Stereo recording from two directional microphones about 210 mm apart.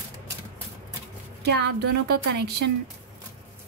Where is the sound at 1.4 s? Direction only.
55° right (ahead or behind).